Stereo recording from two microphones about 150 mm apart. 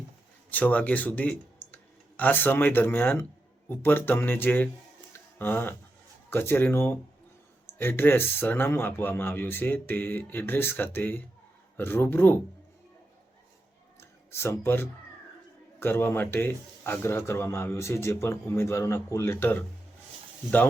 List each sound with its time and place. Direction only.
0.5 s a man's voice: 10° left (ahead or behind)
14.0 s a sound: 15° left (ahead or behind)
15.8 s a man's voice: 15° left (ahead or behind)